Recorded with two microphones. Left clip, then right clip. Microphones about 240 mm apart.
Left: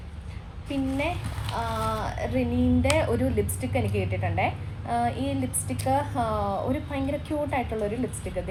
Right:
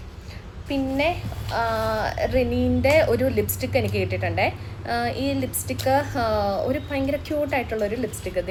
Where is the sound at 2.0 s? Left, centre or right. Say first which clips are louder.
Right 6 dB; right.